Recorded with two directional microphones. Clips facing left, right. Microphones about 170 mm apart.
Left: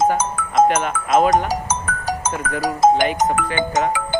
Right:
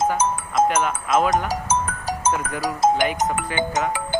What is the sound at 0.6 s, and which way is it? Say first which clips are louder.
Speech: left 2 dB; 60° left (ahead or behind).